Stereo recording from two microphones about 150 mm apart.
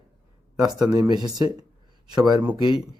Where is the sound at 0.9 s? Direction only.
25° right (ahead or behind).